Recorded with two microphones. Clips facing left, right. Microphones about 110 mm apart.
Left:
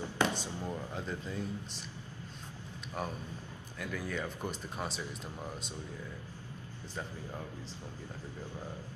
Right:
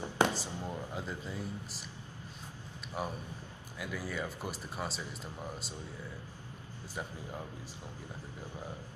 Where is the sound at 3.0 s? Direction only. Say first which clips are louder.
Even; 5° right (ahead or behind).